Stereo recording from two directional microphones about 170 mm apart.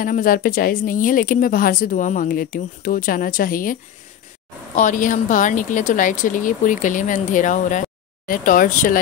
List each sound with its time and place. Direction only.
0.0 s a woman's voice: 55° left (ahead or behind)
4.7 s speech: 50° left (ahead or behind)